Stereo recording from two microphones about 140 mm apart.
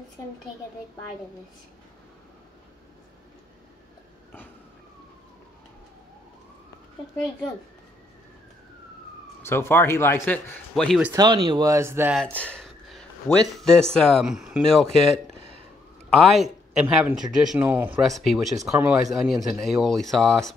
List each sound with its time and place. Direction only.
9.4 s speech: 20° left (ahead or behind)
10.7 s speech: centre (ahead or behind)
11.1 s speech: 30° right (ahead or behind)
12.3 s a sound: 10° left (ahead or behind)
13.6 s a man's voice: 5° left (ahead or behind); by 18.0 s 15° right (ahead or behind)
18.0 s speech: centre (ahead or behind)